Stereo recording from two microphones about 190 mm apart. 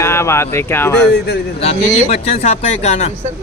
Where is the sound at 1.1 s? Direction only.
60° left (ahead or behind).